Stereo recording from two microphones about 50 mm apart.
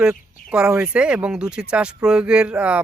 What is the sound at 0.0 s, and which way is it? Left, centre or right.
Speech, centre.